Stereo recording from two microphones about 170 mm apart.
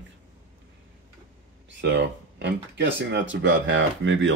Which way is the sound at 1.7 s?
80° right.